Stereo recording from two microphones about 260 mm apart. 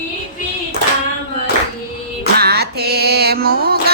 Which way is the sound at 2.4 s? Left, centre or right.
Right.